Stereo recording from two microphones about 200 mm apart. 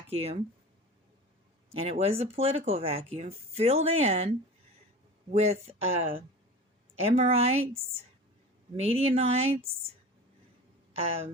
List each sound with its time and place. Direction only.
0.1 s speech: 30° right (ahead or behind)
1.7 s speech: 30° right (ahead or behind)
5.3 s speech: 30° right (ahead or behind)
10.9 s speech: 30° right (ahead or behind)